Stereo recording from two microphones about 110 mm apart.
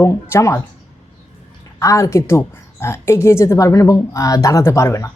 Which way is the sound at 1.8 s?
30° left (ahead or behind).